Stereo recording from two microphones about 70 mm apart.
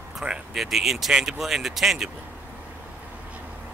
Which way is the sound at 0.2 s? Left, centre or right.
Centre.